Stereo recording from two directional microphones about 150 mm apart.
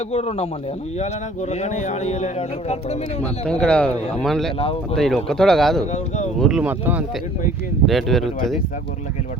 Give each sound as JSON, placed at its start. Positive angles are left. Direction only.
{"t": 0.1, "sound": "a man's voice", "side_deg": 45}
{"t": 3.4, "sound": "speech", "side_deg": 5}
{"t": 4.6, "sound": "speech", "side_deg": 40}
{"t": 4.9, "sound": "speech", "side_deg": 5}
{"t": 5.8, "sound": "a man's voice", "side_deg": 50}
{"t": 6.4, "sound": "speech", "side_deg": -5}
{"t": 7.9, "sound": "speech", "side_deg": 0}